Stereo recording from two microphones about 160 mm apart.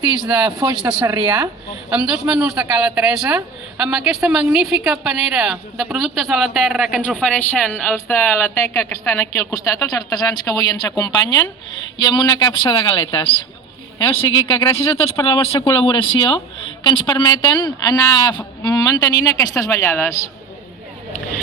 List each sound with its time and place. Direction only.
0.8 s a woman's voice: 5° right (ahead or behind); by 20.3 s 20° left (ahead or behind)